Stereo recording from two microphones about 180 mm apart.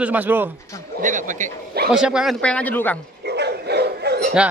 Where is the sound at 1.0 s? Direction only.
45° right (ahead or behind).